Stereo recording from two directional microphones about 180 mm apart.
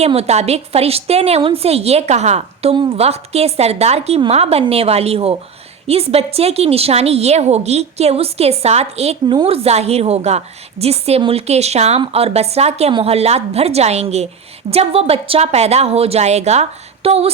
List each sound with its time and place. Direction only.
0.0 s a woman's voice: 35° right (ahead or behind)